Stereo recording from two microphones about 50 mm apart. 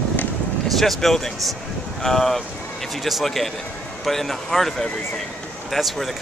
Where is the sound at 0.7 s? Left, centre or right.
Centre.